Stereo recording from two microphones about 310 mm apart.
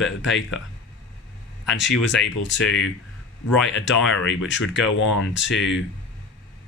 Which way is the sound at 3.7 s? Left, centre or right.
Left.